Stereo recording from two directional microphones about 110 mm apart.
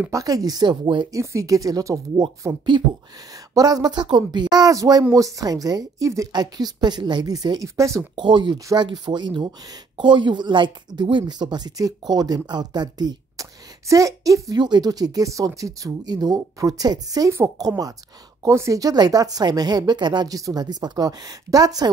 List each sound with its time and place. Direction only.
0.1 s speech: 30° right (ahead or behind)
1.1 s speech: 30° right (ahead or behind)
8.2 s speech: 45° right (ahead or behind)